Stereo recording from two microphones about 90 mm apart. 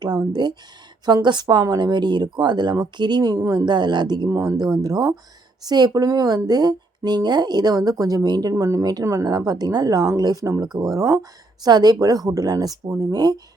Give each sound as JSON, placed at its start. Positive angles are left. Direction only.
{"t": 0.0, "sound": "speech", "side_deg": -50}
{"t": 3.7, "sound": "speech", "side_deg": -55}
{"t": 4.3, "sound": "speech", "side_deg": -30}
{"t": 4.6, "sound": "speech", "side_deg": -45}